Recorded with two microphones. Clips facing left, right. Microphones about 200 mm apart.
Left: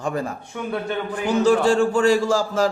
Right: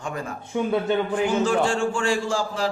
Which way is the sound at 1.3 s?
35° left (ahead or behind).